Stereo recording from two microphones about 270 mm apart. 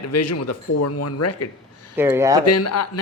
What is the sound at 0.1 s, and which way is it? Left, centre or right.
A man's voice, left.